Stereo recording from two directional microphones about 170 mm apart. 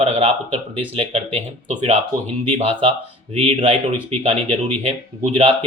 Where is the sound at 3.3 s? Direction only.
35° right (ahead or behind).